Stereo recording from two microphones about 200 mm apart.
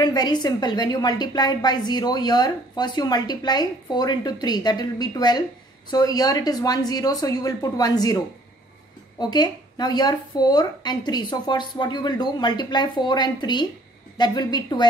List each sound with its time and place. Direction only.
0.0 s a woman's voice: 20° left (ahead or behind)
9.2 s a woman's voice: 20° left (ahead or behind)